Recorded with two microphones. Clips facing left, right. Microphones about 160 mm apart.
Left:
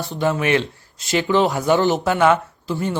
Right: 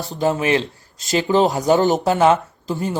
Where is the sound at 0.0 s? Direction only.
40° right (ahead or behind).